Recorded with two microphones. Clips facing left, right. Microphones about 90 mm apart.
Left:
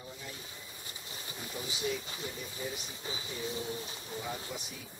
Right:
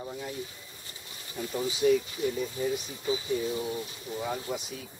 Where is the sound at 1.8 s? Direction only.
60° right (ahead or behind).